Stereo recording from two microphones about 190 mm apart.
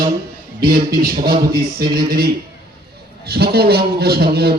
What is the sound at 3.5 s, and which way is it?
A man's voice, 55° right (ahead or behind).